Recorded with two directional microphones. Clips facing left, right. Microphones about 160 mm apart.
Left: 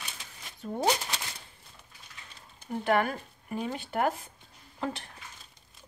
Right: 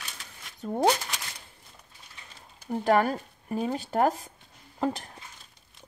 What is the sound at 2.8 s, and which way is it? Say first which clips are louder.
A woman's voice: right 4 dB; 35° right (ahead or behind).